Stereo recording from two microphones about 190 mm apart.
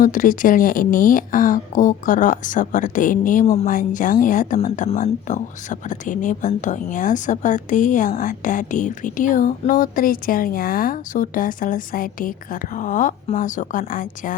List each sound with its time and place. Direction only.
0.0 s speech: 45° left (ahead or behind)